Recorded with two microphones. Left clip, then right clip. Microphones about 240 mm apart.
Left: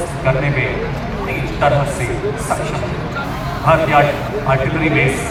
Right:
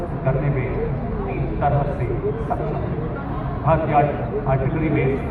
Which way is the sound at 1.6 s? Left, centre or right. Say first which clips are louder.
Left 7 dB; left.